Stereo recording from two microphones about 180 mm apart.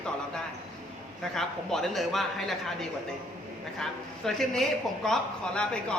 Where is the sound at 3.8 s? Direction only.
Centre (ahead or behind).